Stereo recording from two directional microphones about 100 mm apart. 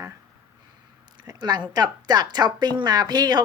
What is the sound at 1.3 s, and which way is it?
A woman's voice, 45° right (ahead or behind).